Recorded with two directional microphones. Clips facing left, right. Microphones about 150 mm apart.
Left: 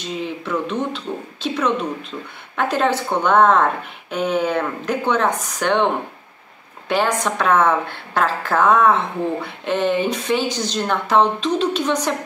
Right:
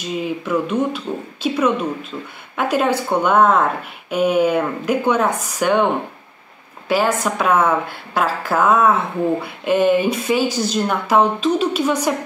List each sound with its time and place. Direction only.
0.0 s a woman's voice: 10° right (ahead or behind)
6.9 s a woman's voice: 5° right (ahead or behind)